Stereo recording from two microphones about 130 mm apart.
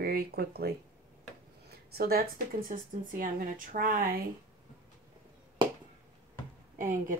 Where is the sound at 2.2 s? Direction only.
90° right.